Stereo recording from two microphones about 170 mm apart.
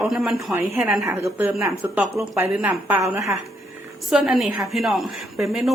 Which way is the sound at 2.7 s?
15° right (ahead or behind).